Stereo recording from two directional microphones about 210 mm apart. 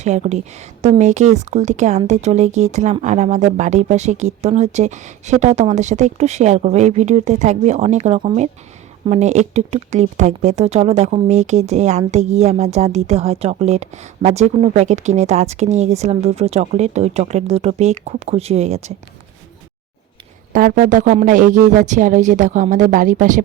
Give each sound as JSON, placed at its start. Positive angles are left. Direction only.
{"t": 0.0, "sound": "speech", "side_deg": -35}
{"t": 20.5, "sound": "speech", "side_deg": -40}